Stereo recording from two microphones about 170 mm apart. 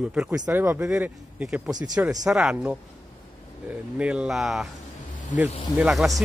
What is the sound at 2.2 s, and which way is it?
Speech, centre (ahead or behind).